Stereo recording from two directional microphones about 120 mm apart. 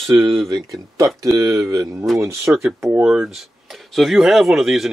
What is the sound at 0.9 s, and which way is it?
Speech, 25° right (ahead or behind).